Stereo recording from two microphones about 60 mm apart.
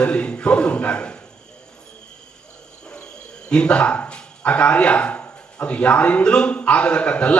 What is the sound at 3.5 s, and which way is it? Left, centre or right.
Speech, centre.